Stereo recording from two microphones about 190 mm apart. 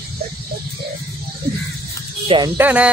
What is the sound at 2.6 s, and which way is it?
Speech, 10° right (ahead or behind).